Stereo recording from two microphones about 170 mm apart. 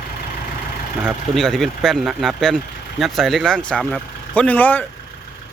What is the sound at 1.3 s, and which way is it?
Speech, centre (ahead or behind).